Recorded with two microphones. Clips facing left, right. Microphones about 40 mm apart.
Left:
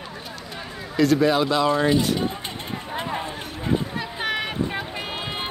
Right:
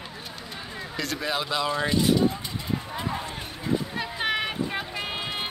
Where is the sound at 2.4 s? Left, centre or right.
Left.